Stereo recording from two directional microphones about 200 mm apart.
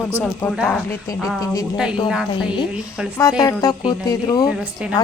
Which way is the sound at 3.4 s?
20° left (ahead or behind).